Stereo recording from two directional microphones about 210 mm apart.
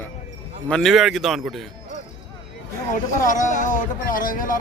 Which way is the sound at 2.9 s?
40° left (ahead or behind).